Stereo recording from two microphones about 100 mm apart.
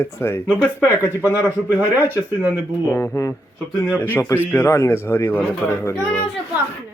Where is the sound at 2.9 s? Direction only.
30° left (ahead or behind).